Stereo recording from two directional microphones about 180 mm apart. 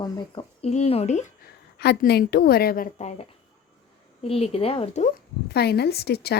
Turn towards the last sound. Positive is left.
turn(degrees=60)  # may be behind; listen again after turning